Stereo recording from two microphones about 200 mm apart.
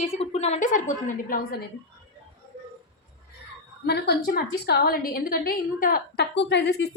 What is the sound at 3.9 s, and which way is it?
A woman's voice, 55° left (ahead or behind).